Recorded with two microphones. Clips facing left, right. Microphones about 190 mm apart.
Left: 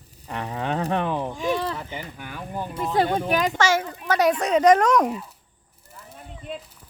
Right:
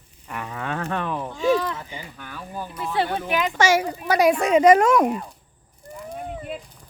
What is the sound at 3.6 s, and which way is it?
A child's voice, 15° right (ahead or behind).